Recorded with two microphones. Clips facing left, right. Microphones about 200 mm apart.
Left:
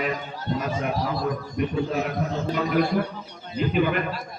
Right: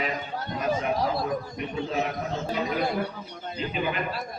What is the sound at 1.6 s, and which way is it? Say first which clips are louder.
Speech: left 8 dB; 50° left (ahead or behind).